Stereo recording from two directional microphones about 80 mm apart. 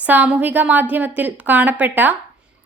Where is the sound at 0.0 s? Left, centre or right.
Centre.